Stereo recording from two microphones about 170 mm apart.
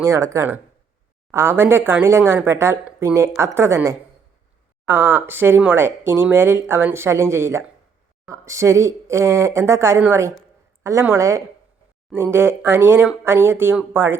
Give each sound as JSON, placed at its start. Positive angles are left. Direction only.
{"t": 0.0, "sound": "speech", "side_deg": -20}